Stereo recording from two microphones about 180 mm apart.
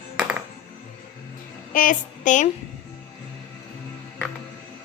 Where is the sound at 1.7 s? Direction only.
45° left (ahead or behind).